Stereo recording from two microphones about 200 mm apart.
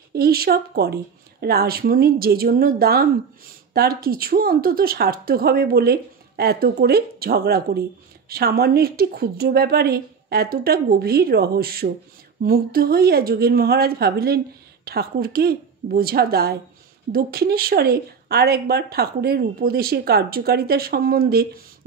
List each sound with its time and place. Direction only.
0.1 s speech: 50° right (ahead or behind)